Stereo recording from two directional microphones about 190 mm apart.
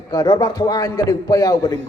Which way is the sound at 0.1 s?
20° left (ahead or behind).